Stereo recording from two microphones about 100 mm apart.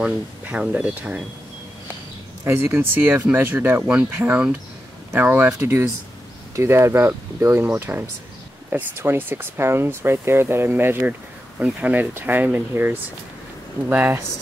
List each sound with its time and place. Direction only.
0.0 s speech: 15° right (ahead or behind)
2.4 s speech: 25° right (ahead or behind)
6.5 s speech: 25° right (ahead or behind)